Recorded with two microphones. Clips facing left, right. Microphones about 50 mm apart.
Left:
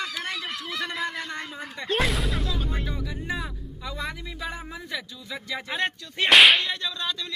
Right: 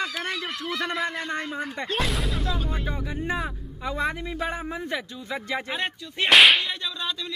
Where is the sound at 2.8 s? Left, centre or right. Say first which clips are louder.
Right 3 dB; right.